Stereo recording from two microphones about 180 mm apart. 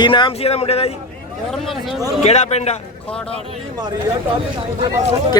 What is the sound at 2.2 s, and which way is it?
Speech, 40° left (ahead or behind).